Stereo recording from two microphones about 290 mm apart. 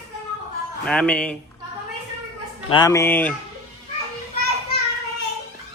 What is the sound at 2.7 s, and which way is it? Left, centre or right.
Speech, centre.